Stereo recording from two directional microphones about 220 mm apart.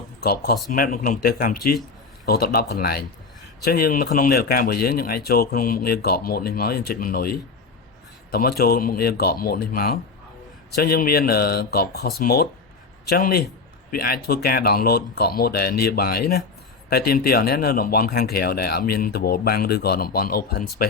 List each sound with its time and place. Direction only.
0.2 s speech: 45° left (ahead or behind)